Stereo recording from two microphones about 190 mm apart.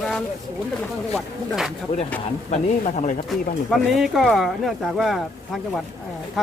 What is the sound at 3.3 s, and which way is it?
Speech, centre (ahead or behind).